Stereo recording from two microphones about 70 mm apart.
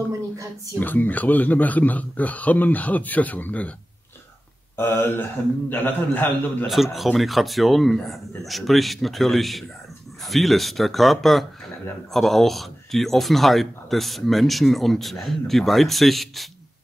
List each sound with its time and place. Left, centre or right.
0.7 s a man's voice: left
4.7 s a man's voice: left
6.7 s speech: centre